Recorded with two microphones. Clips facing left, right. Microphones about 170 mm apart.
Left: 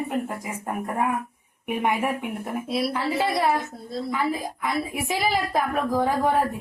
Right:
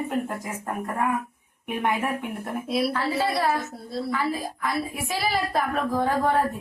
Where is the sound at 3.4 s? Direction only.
20° left (ahead or behind).